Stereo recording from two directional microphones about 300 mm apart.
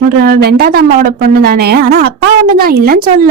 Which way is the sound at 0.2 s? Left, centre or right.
Right.